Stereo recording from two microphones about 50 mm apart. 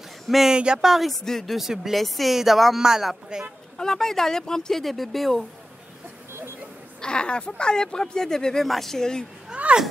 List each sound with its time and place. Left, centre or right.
0.5 s speech: centre
0.8 s speech: centre
3.7 s speech: centre
7.0 s speech: centre
9.5 s a sound: centre